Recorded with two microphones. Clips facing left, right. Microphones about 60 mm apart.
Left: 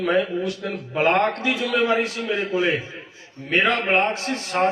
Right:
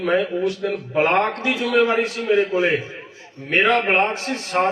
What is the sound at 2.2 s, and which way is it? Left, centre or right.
Speech, centre.